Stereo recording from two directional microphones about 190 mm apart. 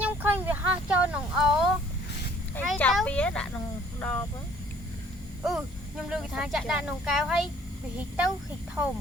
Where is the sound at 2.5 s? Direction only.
5° left (ahead or behind).